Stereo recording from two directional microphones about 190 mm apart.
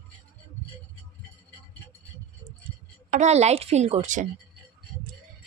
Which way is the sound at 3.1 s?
35° right (ahead or behind).